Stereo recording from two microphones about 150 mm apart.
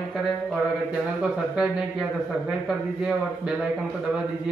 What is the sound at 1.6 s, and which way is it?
A man's voice, 5° right (ahead or behind).